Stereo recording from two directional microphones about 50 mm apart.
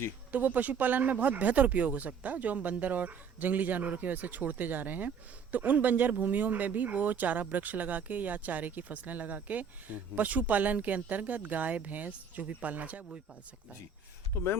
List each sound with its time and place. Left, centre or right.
0.3 s speech: right